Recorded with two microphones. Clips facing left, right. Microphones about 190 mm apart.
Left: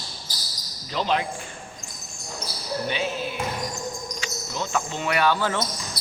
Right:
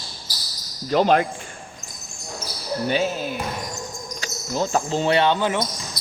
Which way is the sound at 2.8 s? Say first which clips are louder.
Right 7 dB; 40° right (ahead or behind).